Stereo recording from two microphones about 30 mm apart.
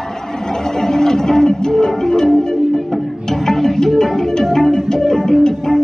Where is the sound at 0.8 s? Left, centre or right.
Centre.